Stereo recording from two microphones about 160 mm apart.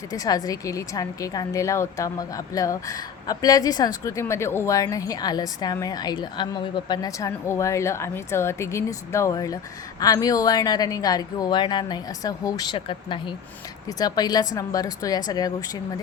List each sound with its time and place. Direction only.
0.1 s a woman's voice: 20° left (ahead or behind)